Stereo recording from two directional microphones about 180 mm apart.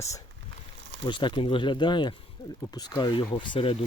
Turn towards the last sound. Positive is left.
turn(degrees=30)  # may be behind; listen again after turning